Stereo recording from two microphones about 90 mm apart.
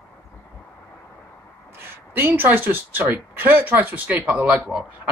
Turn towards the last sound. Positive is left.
turn(degrees=-15)  # may be behind; listen again after turning